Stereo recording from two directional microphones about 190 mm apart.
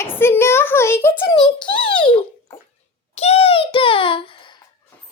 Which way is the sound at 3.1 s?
35° left (ahead or behind).